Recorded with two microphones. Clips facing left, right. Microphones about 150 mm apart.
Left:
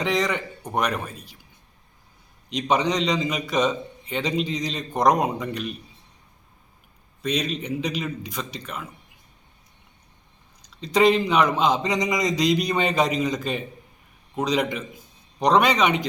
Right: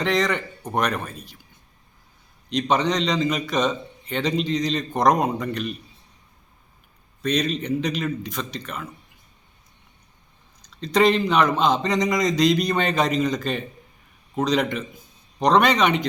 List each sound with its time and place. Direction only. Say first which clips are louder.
0.0 s a man's voice: right 2 dB; 10° left (ahead or behind)
2.5 s a man's voice: right 1 dB; 10° left (ahead or behind)
7.2 s a man's voice: right 3 dB; 5° left (ahead or behind)
10.8 s a man's voice: even; 10° left (ahead or behind)